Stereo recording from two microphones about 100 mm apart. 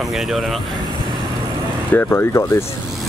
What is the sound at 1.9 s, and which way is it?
Speech, 25° left (ahead or behind).